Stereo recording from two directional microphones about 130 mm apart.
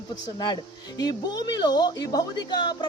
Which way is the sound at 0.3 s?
30° left (ahead or behind).